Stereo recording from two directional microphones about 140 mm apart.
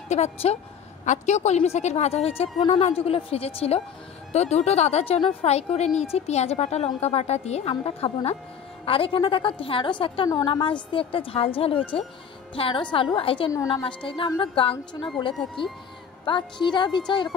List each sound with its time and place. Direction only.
0.1 s a woman's voice: 50° left (ahead or behind); by 17.0 s 35° left (ahead or behind)